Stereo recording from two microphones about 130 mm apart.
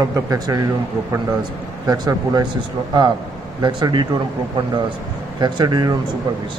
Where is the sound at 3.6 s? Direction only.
35° right (ahead or behind).